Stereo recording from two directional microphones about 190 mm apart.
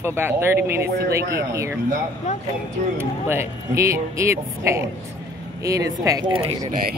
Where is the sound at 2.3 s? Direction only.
40° left (ahead or behind).